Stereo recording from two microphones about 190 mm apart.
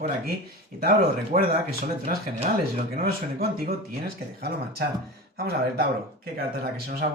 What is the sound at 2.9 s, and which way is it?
Speech, 50° right (ahead or behind).